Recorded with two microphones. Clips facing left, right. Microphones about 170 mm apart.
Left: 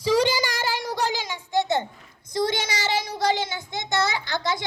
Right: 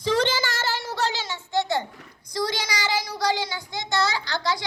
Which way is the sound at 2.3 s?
25° left (ahead or behind).